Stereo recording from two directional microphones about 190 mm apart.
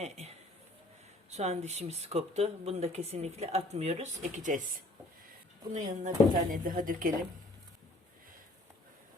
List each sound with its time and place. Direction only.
0.0 s a sound: 35° right (ahead or behind)
1.3 s speech: 35° right (ahead or behind)
5.7 s speech: 40° right (ahead or behind)